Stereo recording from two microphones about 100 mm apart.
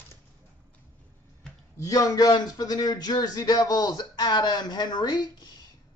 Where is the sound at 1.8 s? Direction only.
35° left (ahead or behind).